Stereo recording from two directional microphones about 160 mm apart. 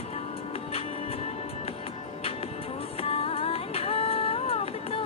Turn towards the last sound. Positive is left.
turn(degrees=40)  # may be behind; listen again after turning